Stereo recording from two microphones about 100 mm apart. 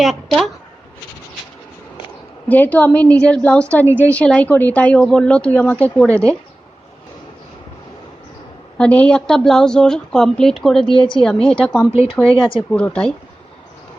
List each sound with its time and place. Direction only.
0.0 s a woman's voice: centre (ahead or behind)
2.5 s speech: 15° left (ahead or behind)
3.8 s a woman's voice: 25° right (ahead or behind)
4.1 s speech: 15° left (ahead or behind)
8.8 s speech: 10° left (ahead or behind)
10.9 s speech: 55° left (ahead or behind)
11.2 s speech: 5° left (ahead or behind)
11.9 s speech: 75° left (ahead or behind)
12.2 s speech: 65° left (ahead or behind)
12.7 s speech: 10° left (ahead or behind)